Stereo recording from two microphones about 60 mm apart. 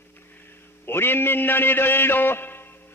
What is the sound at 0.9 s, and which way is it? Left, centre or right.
A man's voice, left.